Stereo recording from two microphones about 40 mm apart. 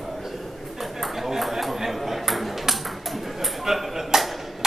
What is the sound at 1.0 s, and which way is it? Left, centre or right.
Ping, centre.